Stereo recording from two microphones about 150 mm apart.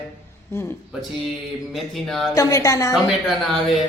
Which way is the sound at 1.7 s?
Centre (ahead or behind).